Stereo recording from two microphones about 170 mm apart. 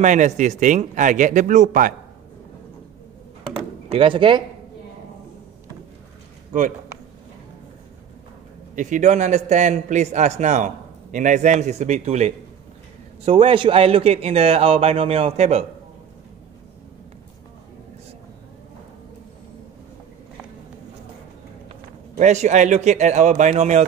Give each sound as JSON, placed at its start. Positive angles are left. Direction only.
{"t": 0.0, "sound": "a man's voice", "side_deg": -45}
{"t": 3.9, "sound": "speech", "side_deg": -30}
{"t": 8.7, "sound": "a man's voice", "side_deg": -45}
{"t": 21.6, "sound": "a man's voice", "side_deg": -45}